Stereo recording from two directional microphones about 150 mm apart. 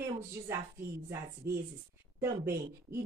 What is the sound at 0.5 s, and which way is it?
Speech, 15° right (ahead or behind).